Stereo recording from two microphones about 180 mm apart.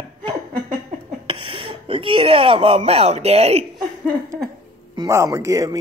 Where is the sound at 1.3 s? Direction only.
30° right (ahead or behind).